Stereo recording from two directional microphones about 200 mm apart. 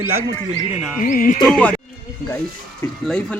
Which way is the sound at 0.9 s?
45° left (ahead or behind).